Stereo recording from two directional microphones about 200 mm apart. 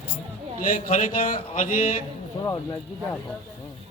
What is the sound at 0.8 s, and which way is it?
Speech, 45° left (ahead or behind).